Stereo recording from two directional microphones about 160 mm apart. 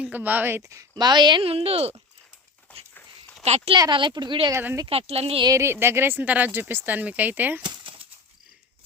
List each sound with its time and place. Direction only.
0.0 s a woman's voice: 10° right (ahead or behind); by 2.0 s 40° right (ahead or behind)
3.4 s speech: 45° right (ahead or behind)
3.8 s a woman's voice: 30° right (ahead or behind)
4.5 s speech: 15° right (ahead or behind)
4.9 s speech: 40° right (ahead or behind)
5.5 s speech: 15° right (ahead or behind)
7.6 s a sound: 30° right (ahead or behind)